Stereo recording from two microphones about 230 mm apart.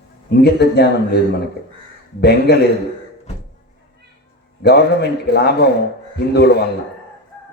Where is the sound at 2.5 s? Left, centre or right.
Left.